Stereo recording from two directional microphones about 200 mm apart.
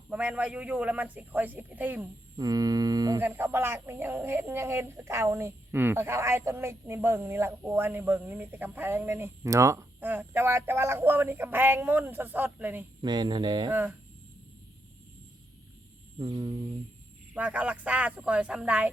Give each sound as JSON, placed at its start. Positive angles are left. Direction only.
{"t": 0.1, "sound": "a man's voice", "side_deg": -5}
{"t": 13.0, "sound": "speech", "side_deg": -20}
{"t": 13.7, "sound": "a man's voice", "side_deg": -10}
{"t": 16.1, "sound": "speech", "side_deg": -25}
{"t": 17.3, "sound": "a man's voice", "side_deg": -5}